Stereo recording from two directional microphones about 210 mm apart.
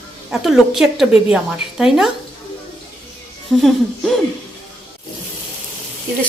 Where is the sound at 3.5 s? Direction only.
Centre (ahead or behind).